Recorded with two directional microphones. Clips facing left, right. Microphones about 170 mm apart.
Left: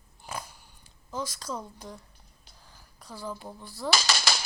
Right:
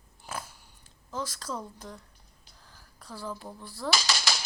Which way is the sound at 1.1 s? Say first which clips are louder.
Left 1 dB; centre (ahead or behind).